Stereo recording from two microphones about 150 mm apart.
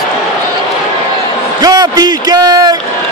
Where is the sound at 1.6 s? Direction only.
25° right (ahead or behind).